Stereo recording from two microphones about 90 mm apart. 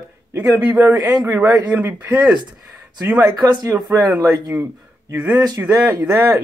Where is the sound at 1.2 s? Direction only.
20° right (ahead or behind).